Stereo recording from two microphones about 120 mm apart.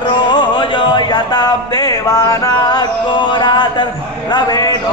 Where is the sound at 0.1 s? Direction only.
40° left (ahead or behind).